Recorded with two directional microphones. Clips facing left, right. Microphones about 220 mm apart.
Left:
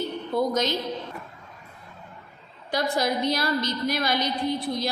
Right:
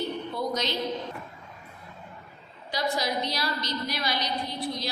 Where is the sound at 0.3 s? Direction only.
45° left (ahead or behind).